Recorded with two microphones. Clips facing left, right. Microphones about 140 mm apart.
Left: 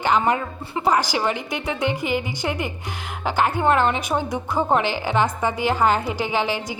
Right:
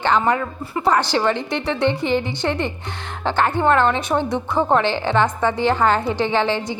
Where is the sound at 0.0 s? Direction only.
15° left (ahead or behind).